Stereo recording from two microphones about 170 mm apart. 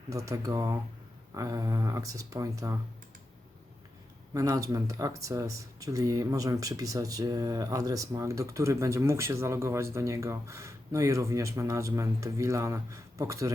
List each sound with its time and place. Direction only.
0.1 s speech: 20° right (ahead or behind)
4.4 s speech: 20° right (ahead or behind)